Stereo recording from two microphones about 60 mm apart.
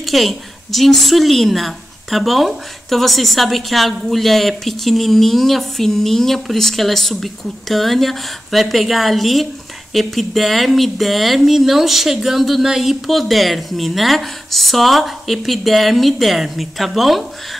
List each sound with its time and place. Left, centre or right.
0.1 s a woman's voice: centre